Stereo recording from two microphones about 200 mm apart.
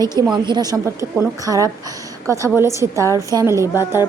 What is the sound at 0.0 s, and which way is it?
A woman's voice, 20° right (ahead or behind).